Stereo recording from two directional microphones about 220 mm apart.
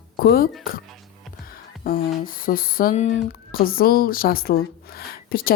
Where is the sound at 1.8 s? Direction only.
40° left (ahead or behind).